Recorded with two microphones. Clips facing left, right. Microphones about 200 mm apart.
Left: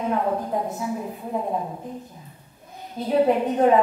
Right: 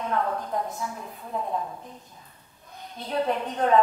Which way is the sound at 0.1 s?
20° left (ahead or behind).